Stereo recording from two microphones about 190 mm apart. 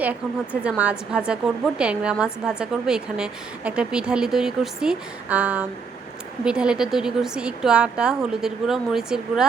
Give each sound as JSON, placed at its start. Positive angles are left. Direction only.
{"t": 0.0, "sound": "a woman's voice", "side_deg": -5}